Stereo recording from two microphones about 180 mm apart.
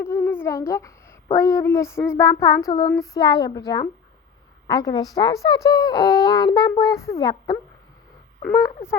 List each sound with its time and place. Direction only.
0.0 s a child's voice: 15° left (ahead or behind)
8.6 s speech: 15° left (ahead or behind)